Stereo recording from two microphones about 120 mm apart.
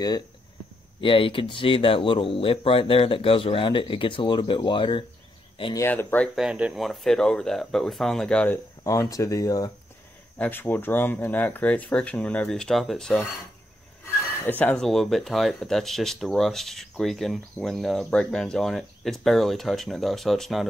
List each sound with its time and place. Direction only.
1.0 s speech: 45° left (ahead or behind)
5.8 s speech: 20° left (ahead or behind)
6.3 s speech: 5° right (ahead or behind); by 8.5 s 10° left (ahead or behind)
8.8 s speech: 30° left (ahead or behind)
10.4 s speech: 15° left (ahead or behind)
14.4 s speech: 15° left (ahead or behind)
14.8 s speech: centre (ahead or behind)